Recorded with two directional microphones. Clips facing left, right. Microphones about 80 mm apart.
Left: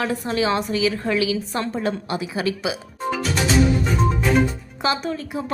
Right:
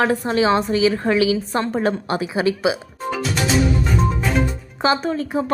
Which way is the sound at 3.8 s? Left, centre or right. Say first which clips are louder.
Even; centre.